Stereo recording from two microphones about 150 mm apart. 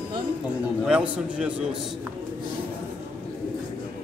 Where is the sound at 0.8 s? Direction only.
5° right (ahead or behind).